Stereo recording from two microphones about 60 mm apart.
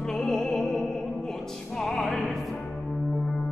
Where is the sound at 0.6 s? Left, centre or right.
Centre.